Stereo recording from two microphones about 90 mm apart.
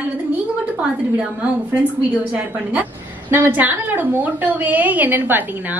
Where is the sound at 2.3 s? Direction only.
20° right (ahead or behind).